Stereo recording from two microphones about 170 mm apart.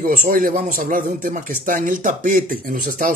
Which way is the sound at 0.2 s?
55° right (ahead or behind).